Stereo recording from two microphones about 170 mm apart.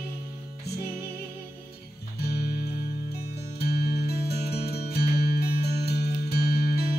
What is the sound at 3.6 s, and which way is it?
Music, 65° left (ahead or behind).